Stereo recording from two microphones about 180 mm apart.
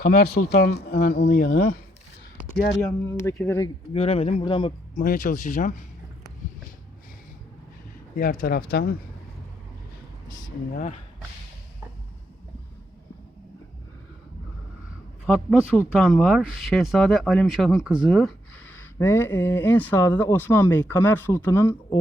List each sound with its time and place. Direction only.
0.0 s speech: 60° left (ahead or behind)
3.3 s speech: 10° left (ahead or behind)
3.9 s speech: 35° left (ahead or behind)
4.9 s speech: 45° left (ahead or behind)
8.1 s speech: 50° left (ahead or behind)
15.3 s speech: centre (ahead or behind)